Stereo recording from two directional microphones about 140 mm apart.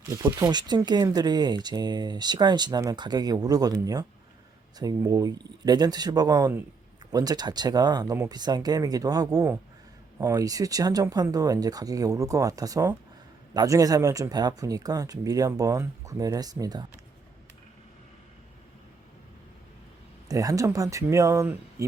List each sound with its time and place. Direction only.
0.1 s speech: 20° right (ahead or behind)
20.2 s speech: 25° right (ahead or behind)